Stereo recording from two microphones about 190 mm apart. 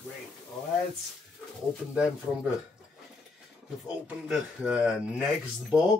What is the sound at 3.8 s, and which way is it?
Speech, 5° right (ahead or behind).